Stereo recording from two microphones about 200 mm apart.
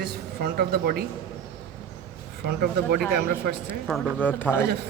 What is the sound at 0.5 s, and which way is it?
Speech, 50° right (ahead or behind).